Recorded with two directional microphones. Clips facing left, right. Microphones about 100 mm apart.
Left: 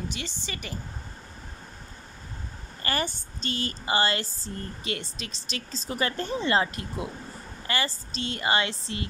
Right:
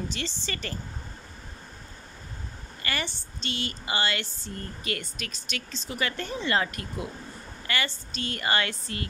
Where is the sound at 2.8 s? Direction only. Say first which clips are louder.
Left 4 dB; 40° left (ahead or behind).